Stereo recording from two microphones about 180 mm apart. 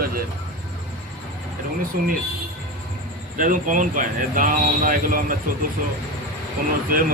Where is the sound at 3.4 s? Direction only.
45° right (ahead or behind).